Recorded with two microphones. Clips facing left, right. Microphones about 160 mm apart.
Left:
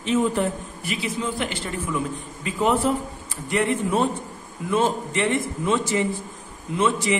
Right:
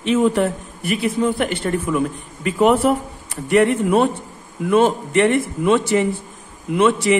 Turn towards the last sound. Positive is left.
turn(degrees=-65)  # may be behind; listen again after turning